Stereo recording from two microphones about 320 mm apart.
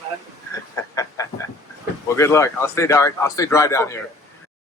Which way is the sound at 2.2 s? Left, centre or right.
Centre.